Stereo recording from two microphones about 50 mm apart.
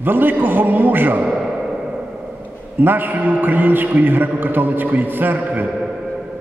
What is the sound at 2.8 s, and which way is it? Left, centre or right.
A man's voice, right.